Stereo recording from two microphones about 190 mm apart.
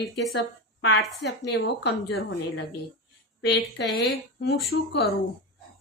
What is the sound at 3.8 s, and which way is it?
Speech, 70° left (ahead or behind).